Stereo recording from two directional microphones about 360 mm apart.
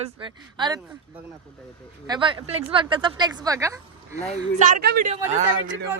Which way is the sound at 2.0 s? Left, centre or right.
Centre.